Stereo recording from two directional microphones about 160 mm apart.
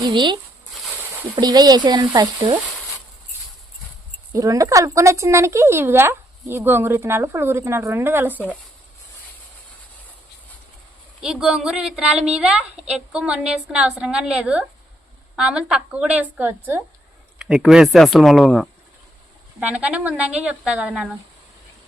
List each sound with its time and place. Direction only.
0.0 s speech: 30° right (ahead or behind)
1.4 s speech: 25° right (ahead or behind)
4.3 s speech: 20° right (ahead or behind)
11.2 s a woman's voice: 5° right (ahead or behind)